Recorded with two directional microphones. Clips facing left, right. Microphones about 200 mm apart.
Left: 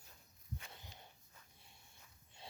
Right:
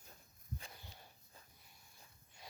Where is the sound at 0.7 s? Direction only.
20° left (ahead or behind).